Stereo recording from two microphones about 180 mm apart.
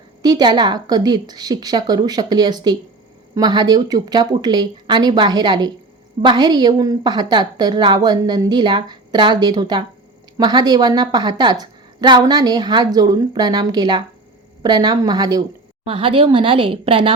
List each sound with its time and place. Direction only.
0.2 s a woman's voice: 25° right (ahead or behind)
15.8 s a woman's voice: 30° right (ahead or behind)